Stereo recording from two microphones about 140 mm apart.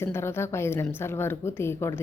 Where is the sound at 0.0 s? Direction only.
20° left (ahead or behind).